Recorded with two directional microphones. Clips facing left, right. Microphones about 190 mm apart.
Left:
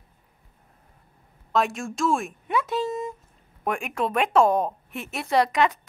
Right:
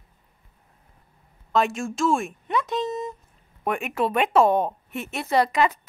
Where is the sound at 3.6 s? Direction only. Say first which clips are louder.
Right 2 dB; 5° right (ahead or behind).